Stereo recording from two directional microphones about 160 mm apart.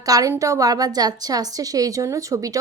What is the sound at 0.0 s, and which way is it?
A woman's voice, 20° right (ahead or behind).